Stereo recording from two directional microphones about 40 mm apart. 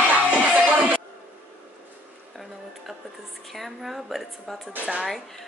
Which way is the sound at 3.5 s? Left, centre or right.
Centre.